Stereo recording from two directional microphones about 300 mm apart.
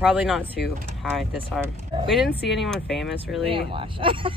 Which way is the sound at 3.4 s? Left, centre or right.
Centre.